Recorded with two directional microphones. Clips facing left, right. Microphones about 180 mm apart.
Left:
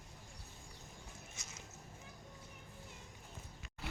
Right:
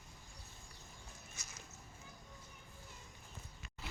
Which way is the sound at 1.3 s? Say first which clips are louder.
Left 2 dB; 25° left (ahead or behind).